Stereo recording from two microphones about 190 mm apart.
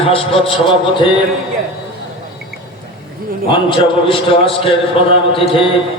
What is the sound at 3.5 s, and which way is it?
A man's voice, 25° left (ahead or behind).